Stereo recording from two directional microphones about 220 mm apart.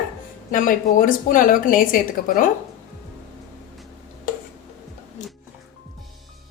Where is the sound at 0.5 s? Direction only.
35° left (ahead or behind).